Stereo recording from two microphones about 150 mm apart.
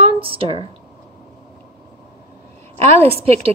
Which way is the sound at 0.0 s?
35° right (ahead or behind).